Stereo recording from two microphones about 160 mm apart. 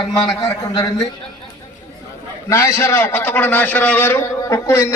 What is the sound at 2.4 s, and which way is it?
A man's voice, 15° left (ahead or behind).